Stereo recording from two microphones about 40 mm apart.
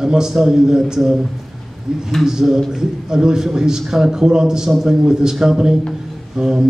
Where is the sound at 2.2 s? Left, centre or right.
Centre.